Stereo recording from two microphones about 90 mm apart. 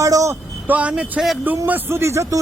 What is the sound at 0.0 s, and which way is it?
Vehicle, 40° right (ahead or behind).